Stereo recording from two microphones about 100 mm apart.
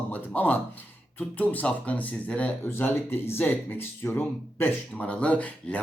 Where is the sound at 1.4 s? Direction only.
15° left (ahead or behind).